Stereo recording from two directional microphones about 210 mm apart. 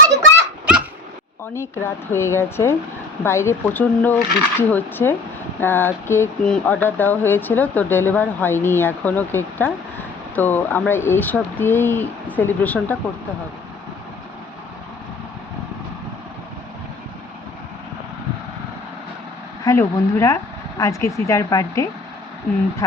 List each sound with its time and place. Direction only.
0.3 s a sound: 5° right (ahead or behind)
1.5 s speech: 10° left (ahead or behind)
19.6 s speech: 15° left (ahead or behind)